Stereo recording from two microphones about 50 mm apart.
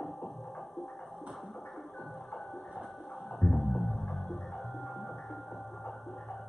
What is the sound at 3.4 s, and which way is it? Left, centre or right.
Music, centre.